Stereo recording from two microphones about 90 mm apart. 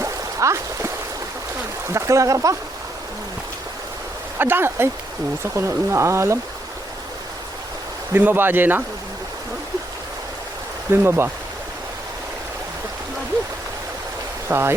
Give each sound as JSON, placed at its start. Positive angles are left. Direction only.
{"t": 0.0, "sound": "a sound", "side_deg": -35}
{"t": 1.9, "sound": "speech", "side_deg": -35}
{"t": 4.4, "sound": "speech", "side_deg": -25}
{"t": 8.1, "sound": "speech", "side_deg": -20}
{"t": 10.9, "sound": "speech", "side_deg": -25}
{"t": 14.4, "sound": "speech", "side_deg": -25}